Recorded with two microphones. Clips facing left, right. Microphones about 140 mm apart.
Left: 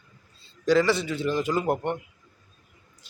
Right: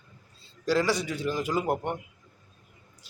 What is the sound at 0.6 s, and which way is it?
A man's voice, 10° right (ahead or behind).